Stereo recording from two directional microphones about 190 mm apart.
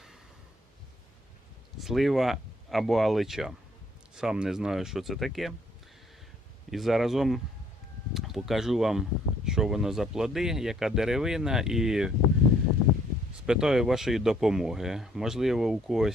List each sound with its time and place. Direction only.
1.8 s speech: centre (ahead or behind)
6.7 s speech: centre (ahead or behind)
13.4 s speech: 5° right (ahead or behind)